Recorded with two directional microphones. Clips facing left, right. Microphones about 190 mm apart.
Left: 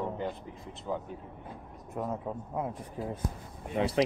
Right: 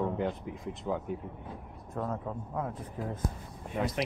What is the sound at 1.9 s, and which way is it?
Speech, 15° left (ahead or behind).